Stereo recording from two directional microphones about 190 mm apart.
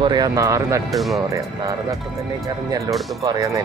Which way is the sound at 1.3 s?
15° right (ahead or behind).